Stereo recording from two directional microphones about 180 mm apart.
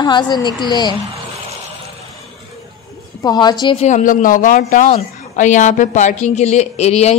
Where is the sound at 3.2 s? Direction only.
25° left (ahead or behind).